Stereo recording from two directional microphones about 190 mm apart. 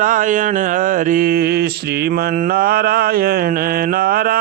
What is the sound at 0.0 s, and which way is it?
Mantra, 45° right (ahead or behind).